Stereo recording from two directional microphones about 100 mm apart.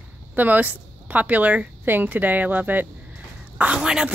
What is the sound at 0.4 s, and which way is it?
A woman's voice, 15° right (ahead or behind).